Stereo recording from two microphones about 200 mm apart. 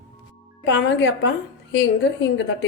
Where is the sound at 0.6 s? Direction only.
65° left (ahead or behind).